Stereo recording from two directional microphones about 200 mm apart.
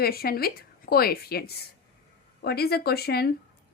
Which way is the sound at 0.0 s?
50° left (ahead or behind).